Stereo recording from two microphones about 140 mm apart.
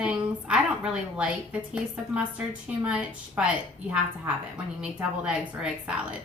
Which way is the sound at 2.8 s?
10° right (ahead or behind).